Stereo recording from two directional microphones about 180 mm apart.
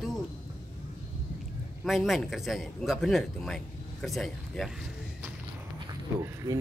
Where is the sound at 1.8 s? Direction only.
Centre (ahead or behind).